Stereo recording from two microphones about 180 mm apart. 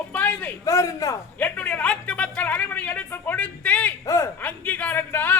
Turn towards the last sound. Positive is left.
turn(degrees=10)  # may be behind; listen again after turning